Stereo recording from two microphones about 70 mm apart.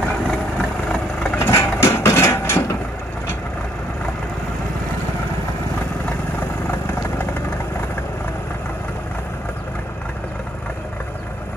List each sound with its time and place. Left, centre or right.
0.3 s vehicle: centre
1.3 s vehicle: left
6.7 s vehicle: left